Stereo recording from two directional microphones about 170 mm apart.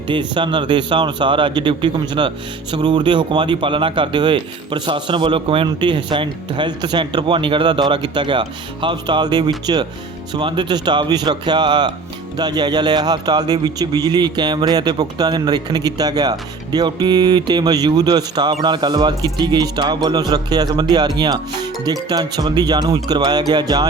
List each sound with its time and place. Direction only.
0.1 s speech: 30° right (ahead or behind)